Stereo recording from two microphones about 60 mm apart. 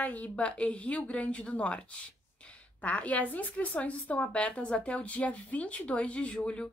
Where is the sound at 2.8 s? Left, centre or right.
Left.